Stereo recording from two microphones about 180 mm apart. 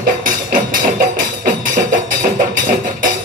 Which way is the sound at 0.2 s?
50° right (ahead or behind).